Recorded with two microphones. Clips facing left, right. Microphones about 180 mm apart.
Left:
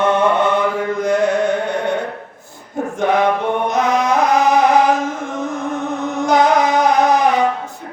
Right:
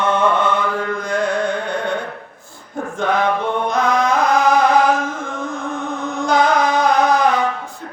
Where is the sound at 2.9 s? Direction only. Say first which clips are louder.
Left 2 dB; 20° left (ahead or behind).